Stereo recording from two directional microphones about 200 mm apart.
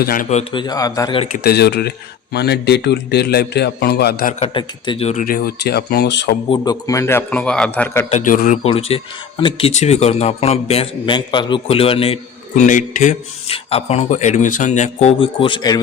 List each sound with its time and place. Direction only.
0.0 s speech: 45° left (ahead or behind)
0.6 s a man's voice: 20° left (ahead or behind)
1.5 s a man's voice: 55° left (ahead or behind)
4.4 s a man's voice: 25° left (ahead or behind); by 6.3 s 55° left (ahead or behind)
6.5 s a man's voice: 20° left (ahead or behind)
8.1 s speech: 40° left (ahead or behind)
8.6 s speech: 30° left (ahead or behind)